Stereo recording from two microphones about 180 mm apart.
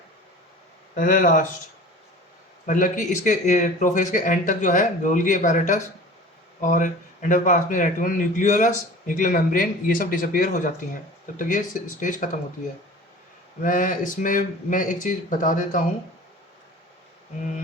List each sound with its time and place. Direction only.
0.9 s a man's voice: 50° left (ahead or behind)
2.6 s a man's voice: 50° left (ahead or behind)
13.6 s a man's voice: 50° left (ahead or behind)